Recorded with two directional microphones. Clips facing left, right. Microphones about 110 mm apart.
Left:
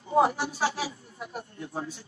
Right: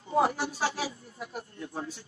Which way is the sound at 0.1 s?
25° left (ahead or behind).